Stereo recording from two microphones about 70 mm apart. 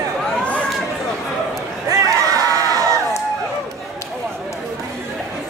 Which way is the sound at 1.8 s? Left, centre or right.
Right.